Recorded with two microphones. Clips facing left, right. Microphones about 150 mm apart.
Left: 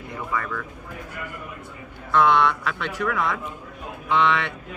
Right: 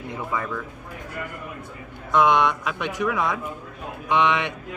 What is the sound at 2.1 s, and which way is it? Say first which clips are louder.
Speech: even; 15° right (ahead or behind).